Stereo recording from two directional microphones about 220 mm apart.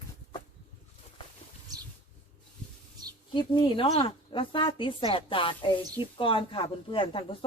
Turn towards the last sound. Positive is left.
turn(degrees=25)  # may be behind; listen again after turning